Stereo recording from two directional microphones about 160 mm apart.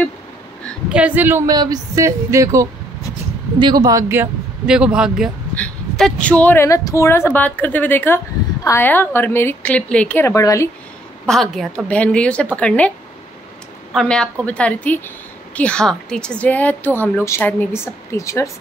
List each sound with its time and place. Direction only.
0.8 s speech: 10° right (ahead or behind)
4.6 s a woman's voice: 5° right (ahead or behind); by 10.7 s 20° left (ahead or behind)
11.2 s a woman's voice: centre (ahead or behind)
13.9 s a woman's voice: 5° left (ahead or behind)